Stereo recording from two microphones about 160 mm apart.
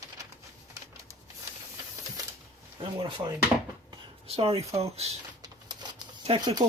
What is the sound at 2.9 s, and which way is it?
Speech, 30° right (ahead or behind).